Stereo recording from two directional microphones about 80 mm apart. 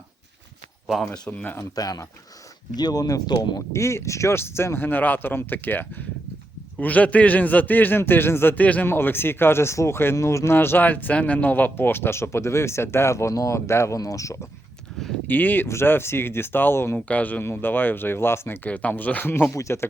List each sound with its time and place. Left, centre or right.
1.7 s speech: left
3.7 s a man's voice: left
15.3 s a man's voice: left
17.1 s a man's voice: centre; by 19.9 s left